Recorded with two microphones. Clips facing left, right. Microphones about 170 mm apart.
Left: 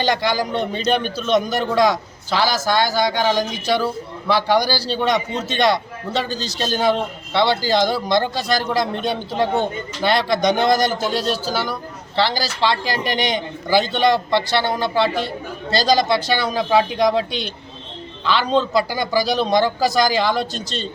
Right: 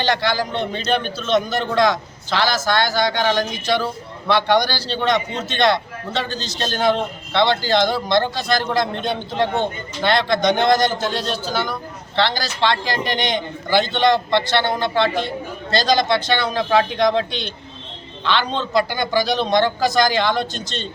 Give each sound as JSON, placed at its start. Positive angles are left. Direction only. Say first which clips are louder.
{"t": 0.0, "sound": "a man's voice", "louder": "left 1 dB", "side_deg": 10}